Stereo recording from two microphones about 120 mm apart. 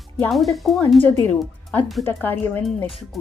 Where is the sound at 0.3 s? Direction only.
Centre (ahead or behind).